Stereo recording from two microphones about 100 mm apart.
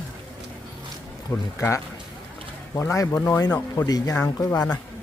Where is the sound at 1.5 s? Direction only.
30° left (ahead or behind).